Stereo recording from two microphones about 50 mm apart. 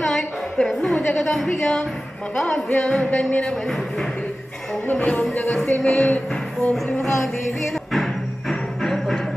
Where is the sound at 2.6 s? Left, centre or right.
Centre.